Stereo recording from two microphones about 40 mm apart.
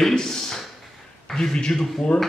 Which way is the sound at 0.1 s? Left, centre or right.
Centre.